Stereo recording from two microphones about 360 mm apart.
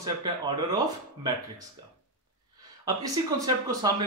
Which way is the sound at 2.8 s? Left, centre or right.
Centre.